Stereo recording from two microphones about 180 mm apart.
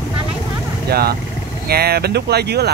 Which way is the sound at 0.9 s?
60° right (ahead or behind).